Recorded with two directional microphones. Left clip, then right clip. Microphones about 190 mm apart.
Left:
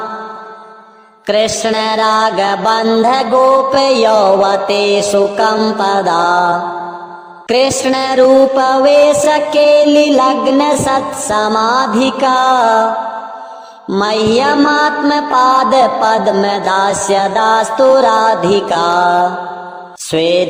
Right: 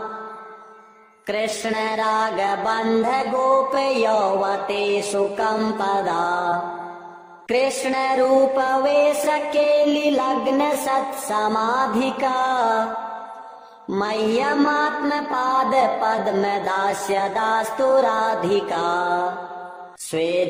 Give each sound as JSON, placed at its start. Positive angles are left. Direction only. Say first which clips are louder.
{"t": 1.3, "sound": "music", "louder": "left 11 dB", "side_deg": 35}
{"t": 7.4, "sound": "music", "louder": "left 9 dB", "side_deg": 35}
{"t": 13.9, "sound": "music", "louder": "left 9 dB", "side_deg": 35}